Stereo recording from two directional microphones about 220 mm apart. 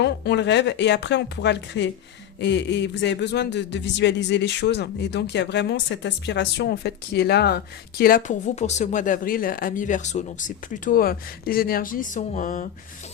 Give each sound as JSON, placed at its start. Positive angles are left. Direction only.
{"t": 0.0, "sound": "speech", "side_deg": 50}